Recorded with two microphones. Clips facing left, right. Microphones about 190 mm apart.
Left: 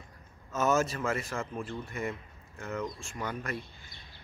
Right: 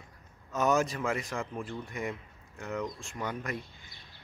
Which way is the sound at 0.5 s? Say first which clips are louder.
Even; 15° right (ahead or behind).